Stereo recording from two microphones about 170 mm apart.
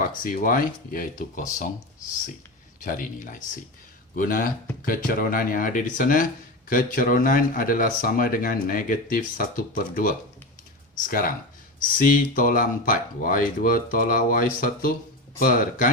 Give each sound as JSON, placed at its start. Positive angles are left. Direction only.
{"t": 0.0, "sound": "speech", "side_deg": 50}
{"t": 2.8, "sound": "speech", "side_deg": 55}
{"t": 11.9, "sound": "speech", "side_deg": 50}